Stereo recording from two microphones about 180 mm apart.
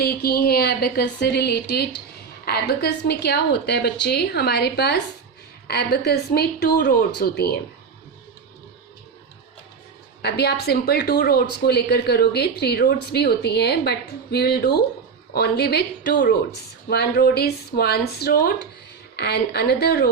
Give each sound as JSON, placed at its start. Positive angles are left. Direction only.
{"t": 0.0, "sound": "speech", "side_deg": 60}
{"t": 10.2, "sound": "speech", "side_deg": 65}